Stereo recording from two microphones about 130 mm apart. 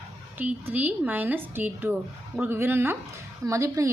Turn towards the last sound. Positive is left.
turn(degrees=-25)  # may be behind; listen again after turning